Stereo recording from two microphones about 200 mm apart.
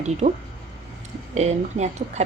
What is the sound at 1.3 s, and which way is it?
Speech, 35° right (ahead or behind).